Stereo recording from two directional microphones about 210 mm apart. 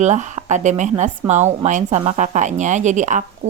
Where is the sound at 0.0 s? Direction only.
35° right (ahead or behind).